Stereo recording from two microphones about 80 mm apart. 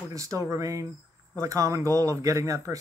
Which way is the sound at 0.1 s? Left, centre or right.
Right.